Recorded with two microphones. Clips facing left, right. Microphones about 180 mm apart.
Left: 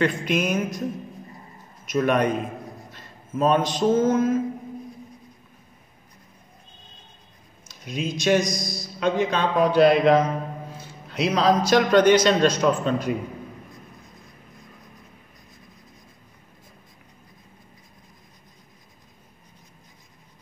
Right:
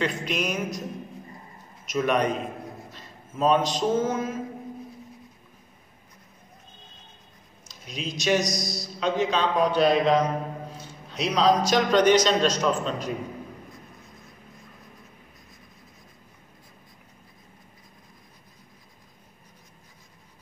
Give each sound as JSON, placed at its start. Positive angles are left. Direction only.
{"t": 0.0, "sound": "a man's voice", "side_deg": 50}
{"t": 1.9, "sound": "a man's voice", "side_deg": 50}
{"t": 7.6, "sound": "a man's voice", "side_deg": 55}